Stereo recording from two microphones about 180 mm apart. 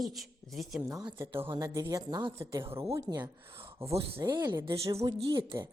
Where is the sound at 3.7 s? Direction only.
15° right (ahead or behind).